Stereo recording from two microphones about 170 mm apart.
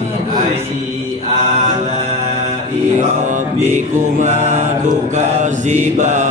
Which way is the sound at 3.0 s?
50° right (ahead or behind).